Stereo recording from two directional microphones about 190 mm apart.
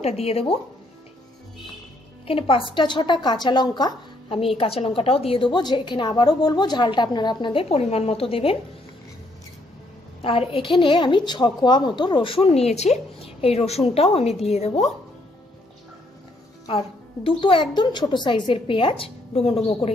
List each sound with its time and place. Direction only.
0.0 s speech: 30° left (ahead or behind)
2.2 s a woman's voice: 30° left (ahead or behind)
10.2 s a woman's voice: 30° left (ahead or behind)
16.6 s a woman's voice: 30° left (ahead or behind)